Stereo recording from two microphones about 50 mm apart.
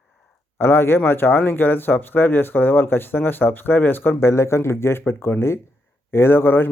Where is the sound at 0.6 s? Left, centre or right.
Left.